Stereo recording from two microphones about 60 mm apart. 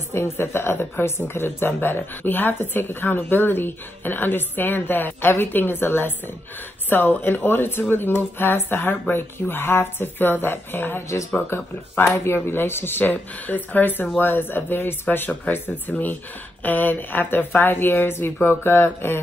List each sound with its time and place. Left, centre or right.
0.1 s speech: left